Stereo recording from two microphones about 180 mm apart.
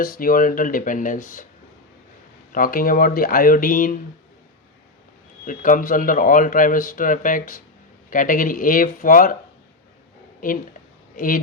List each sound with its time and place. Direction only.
0.0 s speech: 55° left (ahead or behind)
2.5 s speech: 50° left (ahead or behind)
5.5 s speech: 50° left (ahead or behind)
10.4 s speech: 50° left (ahead or behind)